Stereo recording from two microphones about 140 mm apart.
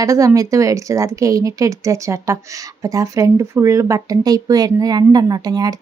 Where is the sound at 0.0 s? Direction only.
25° right (ahead or behind).